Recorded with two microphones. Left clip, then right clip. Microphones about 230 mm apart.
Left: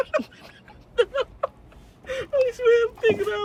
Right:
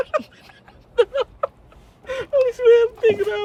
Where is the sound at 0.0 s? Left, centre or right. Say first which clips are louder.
Right 2 dB; centre.